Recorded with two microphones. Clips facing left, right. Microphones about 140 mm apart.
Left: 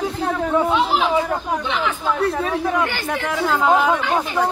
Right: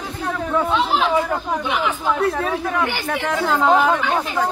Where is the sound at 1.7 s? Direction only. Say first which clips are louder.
Right 2 dB; 15° right (ahead or behind).